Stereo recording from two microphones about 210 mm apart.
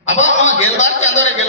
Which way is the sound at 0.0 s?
35° left (ahead or behind).